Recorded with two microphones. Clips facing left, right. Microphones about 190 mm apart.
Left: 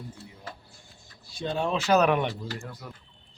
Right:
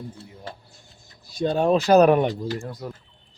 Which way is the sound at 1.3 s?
40° right (ahead or behind).